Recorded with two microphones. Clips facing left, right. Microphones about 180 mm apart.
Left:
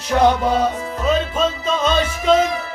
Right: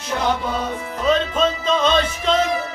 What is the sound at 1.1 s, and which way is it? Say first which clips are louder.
Music: right 1 dB; 10° left (ahead or behind).